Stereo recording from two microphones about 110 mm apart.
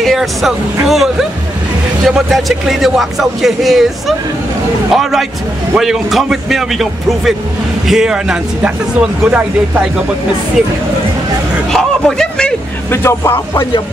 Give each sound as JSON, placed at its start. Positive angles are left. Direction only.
{"t": 0.0, "sound": "speech", "side_deg": 0}
{"t": 5.8, "sound": "speech", "side_deg": 0}
{"t": 11.7, "sound": "a sound", "side_deg": 5}
{"t": 12.9, "sound": "speech", "side_deg": 25}